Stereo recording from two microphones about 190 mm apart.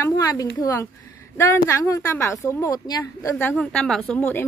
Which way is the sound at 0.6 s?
15° left (ahead or behind).